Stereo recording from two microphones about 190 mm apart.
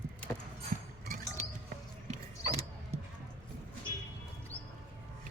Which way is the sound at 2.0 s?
35° right (ahead or behind).